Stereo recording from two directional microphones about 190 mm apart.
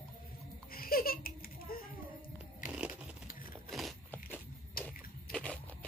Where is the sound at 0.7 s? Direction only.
50° left (ahead or behind).